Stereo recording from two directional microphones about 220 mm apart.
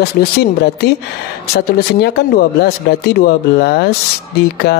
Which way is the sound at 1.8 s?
50° left (ahead or behind).